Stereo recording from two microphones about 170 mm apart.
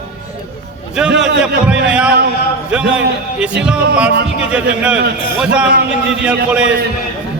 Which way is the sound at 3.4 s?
5° right (ahead or behind).